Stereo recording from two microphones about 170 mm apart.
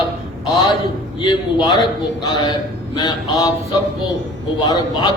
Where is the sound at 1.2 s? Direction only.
25° left (ahead or behind).